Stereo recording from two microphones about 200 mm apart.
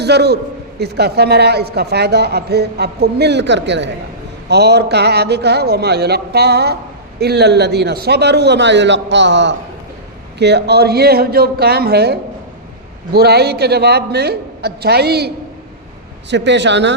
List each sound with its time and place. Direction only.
0.0 s a woman's voice: 55° right (ahead or behind)
16.3 s speech: 60° right (ahead or behind)